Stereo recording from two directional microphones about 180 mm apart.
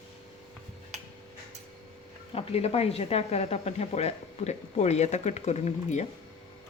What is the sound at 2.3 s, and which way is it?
Speech, 35° left (ahead or behind).